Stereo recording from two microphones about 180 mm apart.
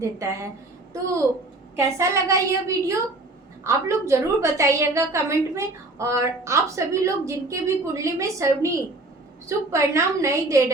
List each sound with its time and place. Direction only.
0.0 s a woman's voice: 15° right (ahead or behind)
1.7 s a woman's voice: 15° right (ahead or behind)